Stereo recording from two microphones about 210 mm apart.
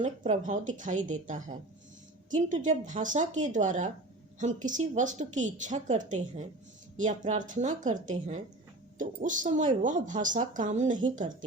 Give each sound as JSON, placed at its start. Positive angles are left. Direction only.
{"t": 0.0, "sound": "a woman's voice", "side_deg": -35}
{"t": 2.3, "sound": "a woman's voice", "side_deg": -35}